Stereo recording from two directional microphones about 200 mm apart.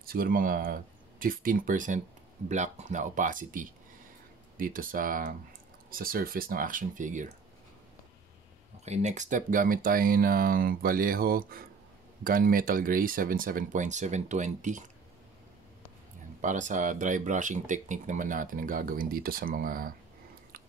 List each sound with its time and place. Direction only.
0.0 s speech: 45° right (ahead or behind)
8.8 s speech: 35° right (ahead or behind)
16.3 s speech: 40° right (ahead or behind)